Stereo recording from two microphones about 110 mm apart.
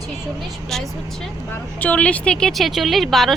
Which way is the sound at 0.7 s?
5° left (ahead or behind).